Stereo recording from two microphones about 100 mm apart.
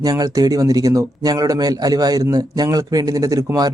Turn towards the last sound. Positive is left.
turn(degrees=-35)  # may be behind; listen again after turning